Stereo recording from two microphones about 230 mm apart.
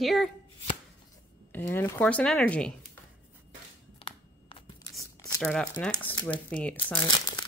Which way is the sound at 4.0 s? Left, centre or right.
Left.